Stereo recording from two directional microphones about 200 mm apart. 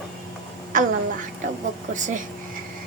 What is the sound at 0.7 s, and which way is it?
Speech, 40° right (ahead or behind).